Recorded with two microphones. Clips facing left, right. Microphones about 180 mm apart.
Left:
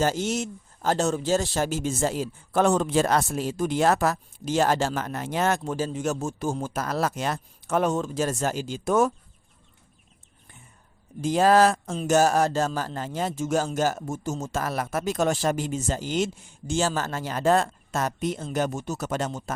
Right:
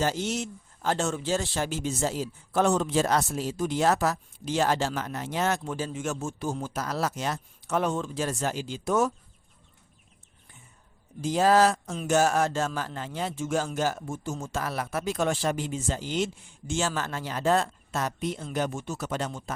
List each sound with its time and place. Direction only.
0.0 s speech: 45° left (ahead or behind)
11.2 s speech: 55° left (ahead or behind)
11.9 s a man's voice: 35° left (ahead or behind)